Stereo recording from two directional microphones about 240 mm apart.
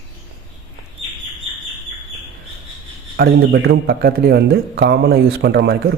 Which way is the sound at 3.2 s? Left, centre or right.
Right.